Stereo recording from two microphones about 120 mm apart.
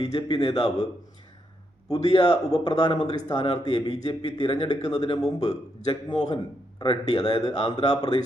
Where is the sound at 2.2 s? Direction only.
35° left (ahead or behind).